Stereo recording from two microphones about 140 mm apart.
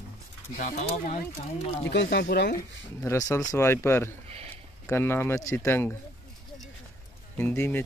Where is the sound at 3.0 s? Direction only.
20° left (ahead or behind).